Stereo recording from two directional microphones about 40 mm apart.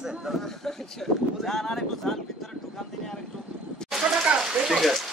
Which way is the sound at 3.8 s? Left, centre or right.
Centre.